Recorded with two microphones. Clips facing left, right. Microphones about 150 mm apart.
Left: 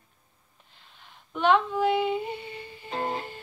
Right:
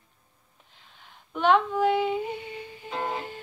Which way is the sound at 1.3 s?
Centre (ahead or behind).